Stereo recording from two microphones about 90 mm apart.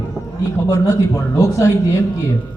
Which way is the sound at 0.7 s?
35° left (ahead or behind).